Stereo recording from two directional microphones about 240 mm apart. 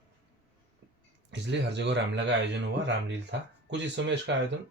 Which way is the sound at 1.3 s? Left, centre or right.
Right.